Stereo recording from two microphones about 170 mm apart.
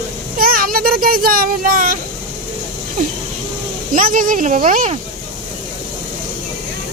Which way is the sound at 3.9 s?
55° right (ahead or behind).